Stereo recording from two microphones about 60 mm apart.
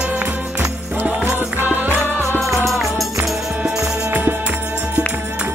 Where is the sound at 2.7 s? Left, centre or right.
Centre.